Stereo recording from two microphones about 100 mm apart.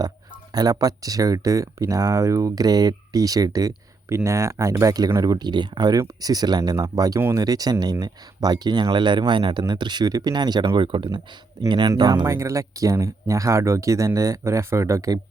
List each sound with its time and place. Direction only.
0.5 s speech: 40° right (ahead or behind)
12.2 s speech: 30° right (ahead or behind)